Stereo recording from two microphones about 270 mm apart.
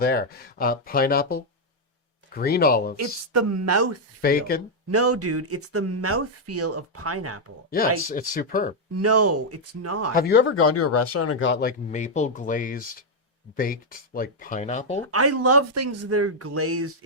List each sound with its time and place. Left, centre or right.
0.0 s speech: left
3.0 s speech: right
4.2 s speech: left
4.9 s speech: right
7.7 s speech: left
8.9 s speech: right
10.2 s speech: left
11.9 s speech: left
15.0 s speech: right